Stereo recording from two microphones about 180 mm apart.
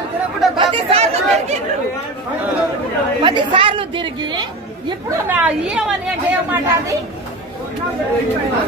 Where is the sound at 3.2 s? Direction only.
25° right (ahead or behind).